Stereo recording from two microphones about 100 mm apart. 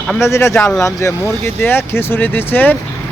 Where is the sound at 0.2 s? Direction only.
30° left (ahead or behind).